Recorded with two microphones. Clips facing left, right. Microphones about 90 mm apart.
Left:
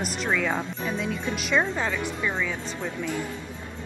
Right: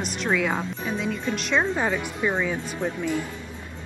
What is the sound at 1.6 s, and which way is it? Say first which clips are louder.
Speech: right 3 dB; 15° right (ahead or behind).